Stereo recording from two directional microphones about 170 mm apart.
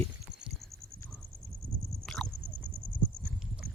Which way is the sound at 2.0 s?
5° left (ahead or behind).